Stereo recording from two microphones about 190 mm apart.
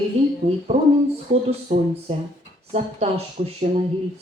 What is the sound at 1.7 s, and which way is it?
Speech, 45° right (ahead or behind).